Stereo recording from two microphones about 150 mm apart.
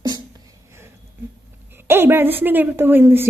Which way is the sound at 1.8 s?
15° right (ahead or behind).